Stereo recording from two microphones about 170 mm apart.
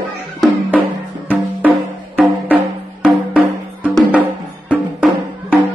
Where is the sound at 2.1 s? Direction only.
10° right (ahead or behind).